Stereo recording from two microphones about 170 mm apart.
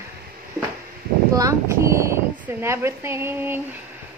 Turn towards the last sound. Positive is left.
turn(degrees=-15)  # may be behind; listen again after turning